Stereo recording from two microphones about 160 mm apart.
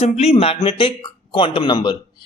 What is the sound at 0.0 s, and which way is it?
Speech, 40° left (ahead or behind).